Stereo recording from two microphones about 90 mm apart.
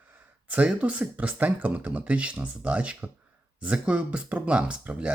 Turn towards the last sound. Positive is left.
turn(degrees=-15)  # may be behind; listen again after turning